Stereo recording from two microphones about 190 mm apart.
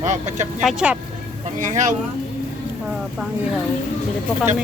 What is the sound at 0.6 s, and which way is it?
Speech, 5° right (ahead or behind).